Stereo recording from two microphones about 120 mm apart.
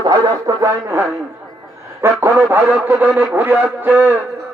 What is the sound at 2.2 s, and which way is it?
A man's voice, 20° right (ahead or behind).